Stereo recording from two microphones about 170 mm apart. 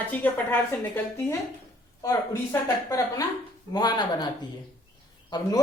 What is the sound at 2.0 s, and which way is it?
Speech, 20° left (ahead or behind).